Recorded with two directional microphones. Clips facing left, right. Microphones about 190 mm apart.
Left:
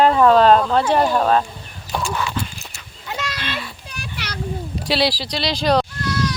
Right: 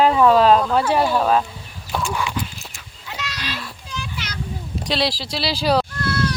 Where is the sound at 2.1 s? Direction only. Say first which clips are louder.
Left 1 dB; 15° right (ahead or behind).